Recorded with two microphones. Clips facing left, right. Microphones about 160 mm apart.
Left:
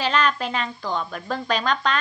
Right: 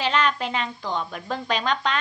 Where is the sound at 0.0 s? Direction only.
20° right (ahead or behind).